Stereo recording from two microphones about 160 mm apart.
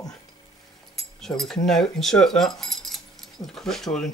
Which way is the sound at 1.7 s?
Centre (ahead or behind).